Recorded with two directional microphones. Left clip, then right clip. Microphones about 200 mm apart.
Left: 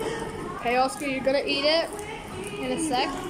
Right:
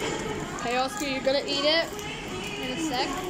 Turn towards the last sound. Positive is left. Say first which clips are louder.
# left 2 dB
turn(degrees=10)  # may be behind; listen again after turning